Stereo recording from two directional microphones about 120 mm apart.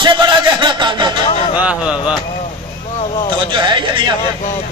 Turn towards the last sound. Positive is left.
turn(degrees=-40)  # may be behind; listen again after turning